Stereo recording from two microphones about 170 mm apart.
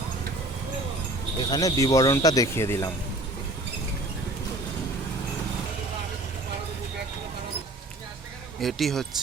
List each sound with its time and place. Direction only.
1.4 s speech: 25° left (ahead or behind)
8.6 s speech: centre (ahead or behind)